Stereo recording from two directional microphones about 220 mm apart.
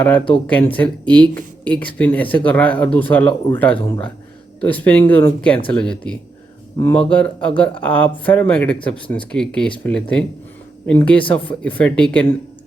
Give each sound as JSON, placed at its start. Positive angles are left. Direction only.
{"t": 0.3, "sound": "speech", "side_deg": 25}
{"t": 0.5, "sound": "speech", "side_deg": 5}